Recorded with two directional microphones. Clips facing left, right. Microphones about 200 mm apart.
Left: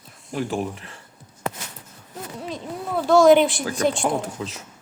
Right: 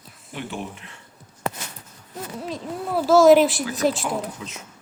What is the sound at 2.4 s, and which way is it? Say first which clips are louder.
Speech: right 1 dB; centre (ahead or behind).